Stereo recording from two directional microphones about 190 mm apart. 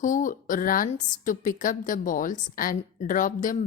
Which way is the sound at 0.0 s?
45° left (ahead or behind).